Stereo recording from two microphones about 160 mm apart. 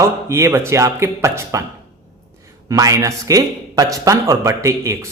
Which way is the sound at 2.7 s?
20° right (ahead or behind).